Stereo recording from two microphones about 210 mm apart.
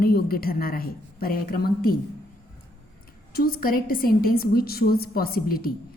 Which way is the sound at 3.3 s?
45° left (ahead or behind).